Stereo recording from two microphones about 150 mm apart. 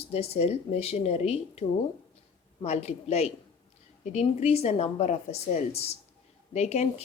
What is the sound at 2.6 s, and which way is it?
A woman's voice, 45° left (ahead or behind).